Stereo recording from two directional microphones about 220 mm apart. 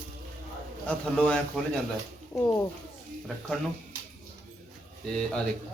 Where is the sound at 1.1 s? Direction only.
5° left (ahead or behind).